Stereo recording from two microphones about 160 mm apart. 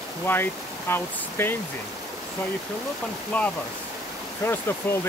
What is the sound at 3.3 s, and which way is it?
Speech, 10° left (ahead or behind).